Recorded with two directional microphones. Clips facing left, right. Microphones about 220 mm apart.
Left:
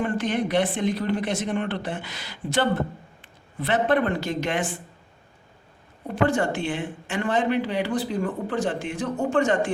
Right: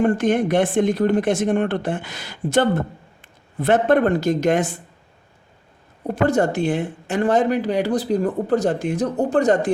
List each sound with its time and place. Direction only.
0.0 s speech: 50° right (ahead or behind)
6.1 s speech: 40° right (ahead or behind)